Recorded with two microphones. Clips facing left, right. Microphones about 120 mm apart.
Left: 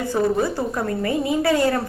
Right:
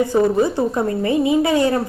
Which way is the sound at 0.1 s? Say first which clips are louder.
Right 4 dB; 20° right (ahead or behind).